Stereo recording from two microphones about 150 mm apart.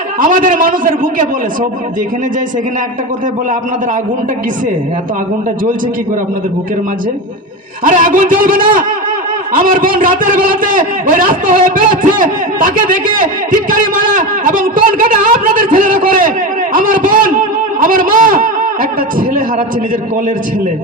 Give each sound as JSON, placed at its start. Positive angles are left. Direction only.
{"t": 0.2, "sound": "a man's voice", "side_deg": -65}
{"t": 7.9, "sound": "a man's voice", "side_deg": -60}
{"t": 16.7, "sound": "a sound", "side_deg": -65}
{"t": 17.8, "sound": "a man's voice", "side_deg": -65}